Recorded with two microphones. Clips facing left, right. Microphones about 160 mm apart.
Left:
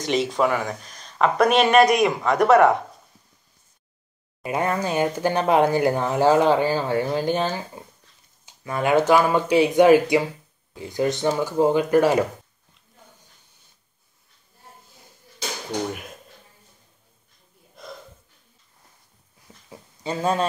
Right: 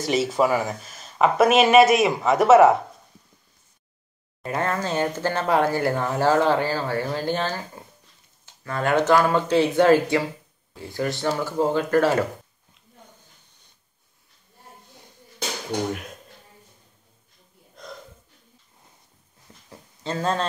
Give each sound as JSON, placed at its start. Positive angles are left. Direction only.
{"t": 0.0, "sound": "speech", "side_deg": -5}
{"t": 4.4, "sound": "speech", "side_deg": 15}
{"t": 17.8, "sound": "snort", "side_deg": 5}
{"t": 19.4, "sound": "a sound", "side_deg": 10}